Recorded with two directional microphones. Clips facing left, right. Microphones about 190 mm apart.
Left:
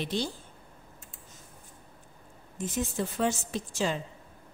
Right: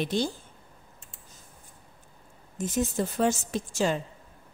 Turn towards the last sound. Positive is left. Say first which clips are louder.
# right 3 dB
turn(degrees=-45)  # may be behind; listen again after turning